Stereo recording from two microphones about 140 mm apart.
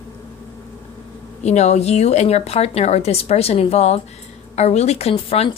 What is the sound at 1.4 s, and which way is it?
Speech, 55° left (ahead or behind).